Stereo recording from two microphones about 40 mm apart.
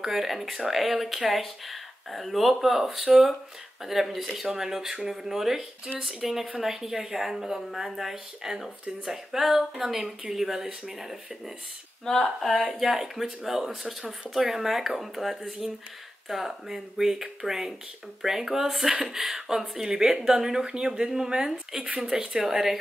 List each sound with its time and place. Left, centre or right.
0.0 s a woman's voice: centre
12.0 s speech: centre
12.7 s a woman's voice: centre